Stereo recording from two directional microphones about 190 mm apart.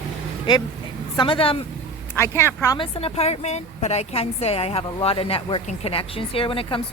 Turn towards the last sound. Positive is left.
turn(degrees=30)  # may be behind; listen again after turning